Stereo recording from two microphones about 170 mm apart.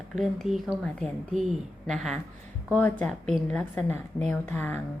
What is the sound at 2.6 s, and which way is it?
A woman's voice, 10° left (ahead or behind).